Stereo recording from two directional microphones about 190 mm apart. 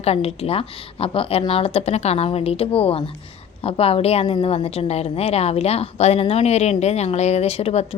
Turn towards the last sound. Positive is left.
turn(degrees=30)  # may be behind; listen again after turning